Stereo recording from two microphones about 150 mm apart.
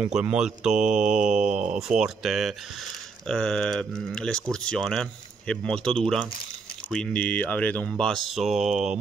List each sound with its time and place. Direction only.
0.1 s speech: 5° right (ahead or behind)
0.7 s mantra: 55° right (ahead or behind)
1.1 s speech: 5° right (ahead or behind)
1.4 s mantra: 55° right (ahead or behind)
1.8 s speech: 5° right (ahead or behind)